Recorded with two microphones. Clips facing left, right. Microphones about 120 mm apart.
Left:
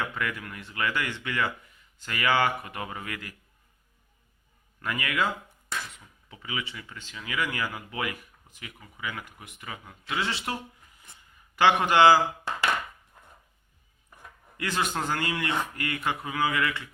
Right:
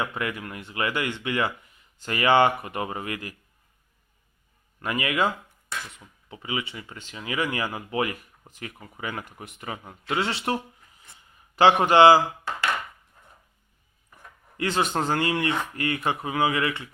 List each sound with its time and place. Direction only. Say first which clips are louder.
0.0 s speech: right 3 dB; 20° right (ahead or behind)
4.8 s speech: right 4 dB; 25° right (ahead or behind)
6.3 s speech: right 4 dB; 25° right (ahead or behind)
14.6 s speech: right 4 dB; 30° right (ahead or behind)